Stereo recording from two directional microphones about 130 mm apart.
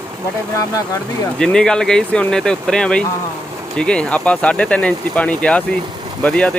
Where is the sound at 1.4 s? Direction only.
5° left (ahead or behind).